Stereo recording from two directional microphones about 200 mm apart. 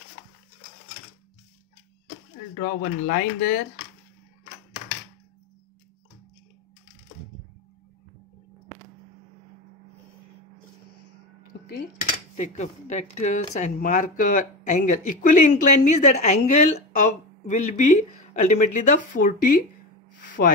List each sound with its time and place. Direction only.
2.5 s speech: 45° left (ahead or behind)
12.4 s speech: 35° left (ahead or behind); by 20.5 s 55° left (ahead or behind)